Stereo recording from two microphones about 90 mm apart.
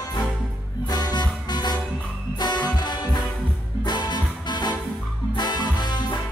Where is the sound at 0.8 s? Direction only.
50° left (ahead or behind).